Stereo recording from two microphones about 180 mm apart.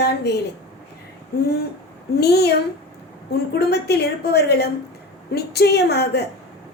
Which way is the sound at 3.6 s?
65° left (ahead or behind).